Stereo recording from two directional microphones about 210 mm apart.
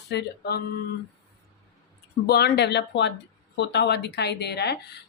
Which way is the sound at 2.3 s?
50° left (ahead or behind).